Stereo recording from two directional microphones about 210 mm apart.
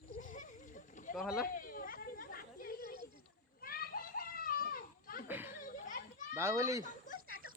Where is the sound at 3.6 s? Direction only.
45° left (ahead or behind).